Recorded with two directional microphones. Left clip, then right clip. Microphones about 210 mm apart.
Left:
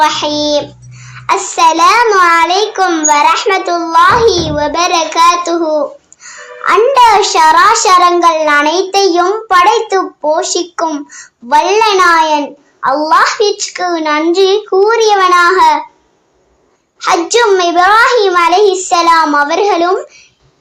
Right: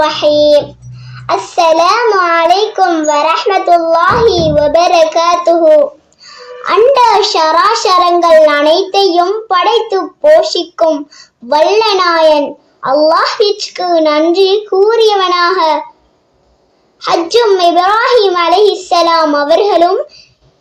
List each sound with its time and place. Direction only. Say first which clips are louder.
0.0 s a child's voice: right 3 dB; 15° left (ahead or behind)
1.1 s child singing: even; 15° left (ahead or behind)
1.8 s a child's voice: left 2 dB; 15° left (ahead or behind)
17.0 s a child's voice: even; 15° left (ahead or behind)